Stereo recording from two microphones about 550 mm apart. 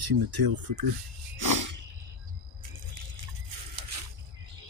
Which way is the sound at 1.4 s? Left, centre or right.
Right.